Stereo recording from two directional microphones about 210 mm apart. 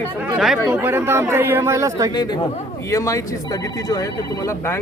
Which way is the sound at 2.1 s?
20° left (ahead or behind).